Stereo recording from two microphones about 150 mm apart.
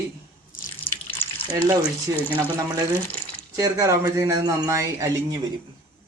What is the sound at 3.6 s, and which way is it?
A man's voice, 20° right (ahead or behind).